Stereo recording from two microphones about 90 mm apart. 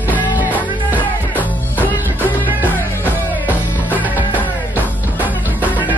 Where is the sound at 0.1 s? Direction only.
20° left (ahead or behind).